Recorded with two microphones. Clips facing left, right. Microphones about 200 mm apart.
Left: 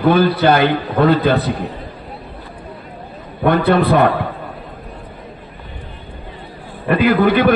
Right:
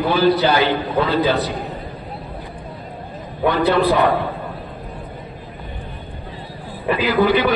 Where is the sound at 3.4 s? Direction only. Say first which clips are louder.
Left 2 dB; 55° left (ahead or behind).